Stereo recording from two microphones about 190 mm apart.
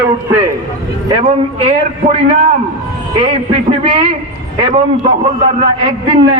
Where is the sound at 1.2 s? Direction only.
35° right (ahead or behind).